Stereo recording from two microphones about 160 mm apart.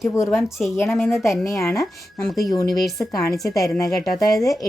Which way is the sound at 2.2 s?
Centre (ahead or behind).